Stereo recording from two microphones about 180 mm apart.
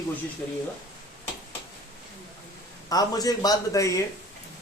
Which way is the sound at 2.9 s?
20° left (ahead or behind).